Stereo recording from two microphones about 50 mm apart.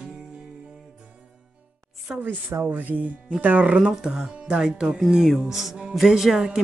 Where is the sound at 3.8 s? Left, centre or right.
Centre.